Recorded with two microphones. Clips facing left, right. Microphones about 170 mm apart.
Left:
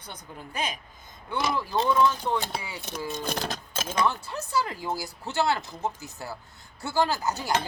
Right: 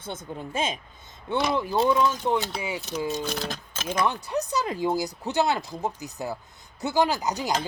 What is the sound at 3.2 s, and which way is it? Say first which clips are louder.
Speech: right 1 dB; 45° left (ahead or behind).